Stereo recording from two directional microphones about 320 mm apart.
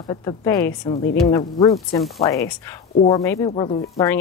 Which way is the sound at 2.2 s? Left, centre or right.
Left.